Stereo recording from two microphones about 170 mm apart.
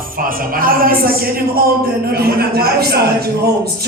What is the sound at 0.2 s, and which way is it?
A man's voice, 55° right (ahead or behind).